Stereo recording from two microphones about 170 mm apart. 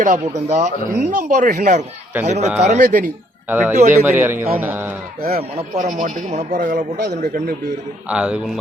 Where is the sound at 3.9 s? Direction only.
15° right (ahead or behind).